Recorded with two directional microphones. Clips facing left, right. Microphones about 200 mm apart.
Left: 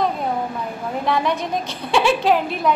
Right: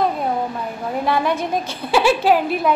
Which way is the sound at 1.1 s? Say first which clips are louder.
Right 1 dB; 5° right (ahead or behind).